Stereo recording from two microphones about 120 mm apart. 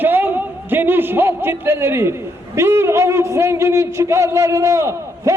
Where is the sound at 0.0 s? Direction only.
15° right (ahead or behind).